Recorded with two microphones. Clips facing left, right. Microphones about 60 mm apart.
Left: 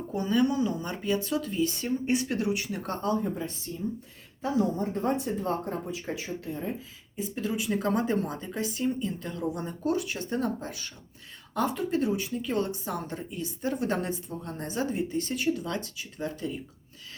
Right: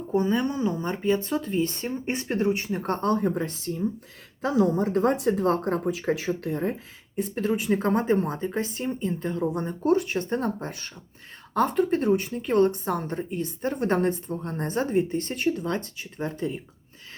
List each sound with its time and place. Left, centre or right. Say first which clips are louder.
0.1 s speech: right 2 dB; right
4.4 s speech: right 5 dB; right
7.3 s speech: right 5 dB; right